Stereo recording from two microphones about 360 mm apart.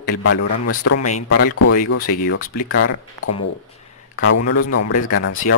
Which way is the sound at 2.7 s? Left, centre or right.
Left.